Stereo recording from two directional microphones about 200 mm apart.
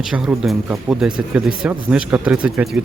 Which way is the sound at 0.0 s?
Centre (ahead or behind).